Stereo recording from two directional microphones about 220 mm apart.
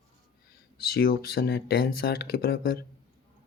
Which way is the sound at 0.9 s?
40° left (ahead or behind).